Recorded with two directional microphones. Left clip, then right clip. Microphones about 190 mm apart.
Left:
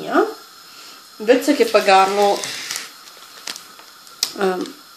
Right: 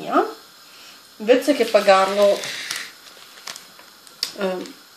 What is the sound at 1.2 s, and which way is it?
Speech, 25° left (ahead or behind).